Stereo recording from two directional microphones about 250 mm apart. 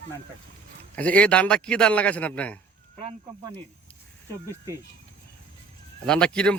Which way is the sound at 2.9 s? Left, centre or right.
Right.